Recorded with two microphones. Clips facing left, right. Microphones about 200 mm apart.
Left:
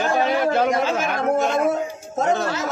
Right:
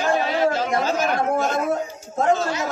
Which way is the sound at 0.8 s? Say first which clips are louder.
Even; 40° right (ahead or behind).